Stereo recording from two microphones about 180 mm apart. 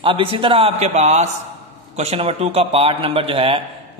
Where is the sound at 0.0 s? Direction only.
30° right (ahead or behind).